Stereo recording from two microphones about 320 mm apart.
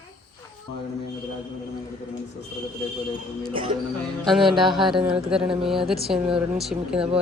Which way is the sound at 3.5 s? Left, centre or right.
Centre.